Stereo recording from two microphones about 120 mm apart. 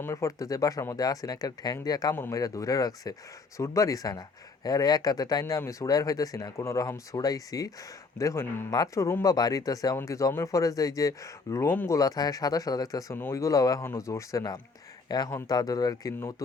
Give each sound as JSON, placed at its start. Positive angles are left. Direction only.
{"t": 0.0, "sound": "speech", "side_deg": 25}